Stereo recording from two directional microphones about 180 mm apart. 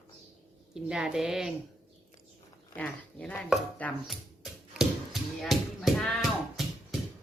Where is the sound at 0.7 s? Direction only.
5° right (ahead or behind).